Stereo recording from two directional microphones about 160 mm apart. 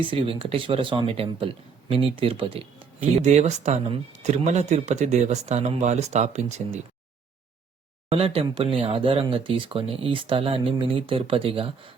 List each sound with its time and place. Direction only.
0.0 s speech: 35° right (ahead or behind)
3.0 s speech: 45° right (ahead or behind)
8.1 s speech: 35° right (ahead or behind)